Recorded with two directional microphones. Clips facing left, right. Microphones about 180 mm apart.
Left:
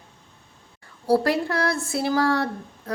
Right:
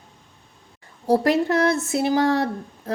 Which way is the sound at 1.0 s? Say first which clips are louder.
Right 2 dB; 20° right (ahead or behind).